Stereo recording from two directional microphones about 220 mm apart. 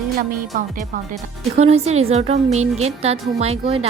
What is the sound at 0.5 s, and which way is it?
A woman's voice, 40° right (ahead or behind).